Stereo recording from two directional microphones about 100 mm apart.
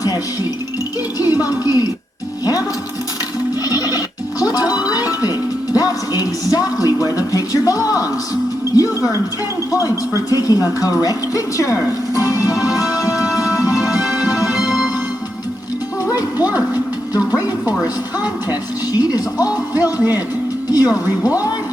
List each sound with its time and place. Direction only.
1.2 s speech: 40° left (ahead or behind)
3.7 s music: 40° left (ahead or behind)
6.8 s a sound: 35° left (ahead or behind)
8.7 s music: 35° left (ahead or behind)
9.7 s a woman's voice: 35° left (ahead or behind)
13.6 s music: 5° right (ahead or behind)
14.3 s music: 35° left (ahead or behind)
16.1 s music: 40° left (ahead or behind)
18.9 s a woman's voice: 40° left (ahead or behind)